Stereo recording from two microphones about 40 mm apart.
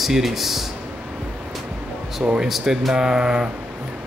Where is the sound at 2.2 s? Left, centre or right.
Centre.